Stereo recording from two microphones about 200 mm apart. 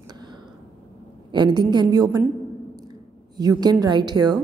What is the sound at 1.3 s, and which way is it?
Speech, 20° right (ahead or behind).